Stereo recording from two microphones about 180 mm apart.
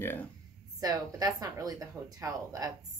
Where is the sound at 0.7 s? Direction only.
20° right (ahead or behind).